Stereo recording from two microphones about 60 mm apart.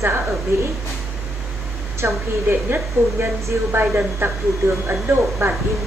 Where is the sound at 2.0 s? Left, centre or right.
Right.